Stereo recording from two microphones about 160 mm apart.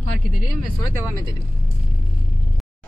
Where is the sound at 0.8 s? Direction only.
20° left (ahead or behind).